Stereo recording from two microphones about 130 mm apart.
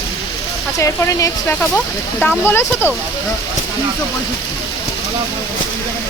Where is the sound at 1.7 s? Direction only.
10° left (ahead or behind).